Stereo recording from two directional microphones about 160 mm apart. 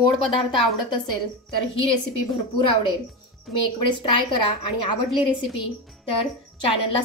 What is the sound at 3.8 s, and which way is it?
A woman's voice, 30° left (ahead or behind).